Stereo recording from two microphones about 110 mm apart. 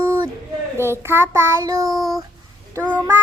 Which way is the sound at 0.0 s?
30° right (ahead or behind).